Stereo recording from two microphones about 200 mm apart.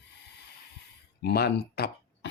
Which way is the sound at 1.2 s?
55° left (ahead or behind).